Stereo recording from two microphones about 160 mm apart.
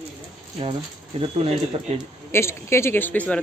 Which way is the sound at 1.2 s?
40° right (ahead or behind).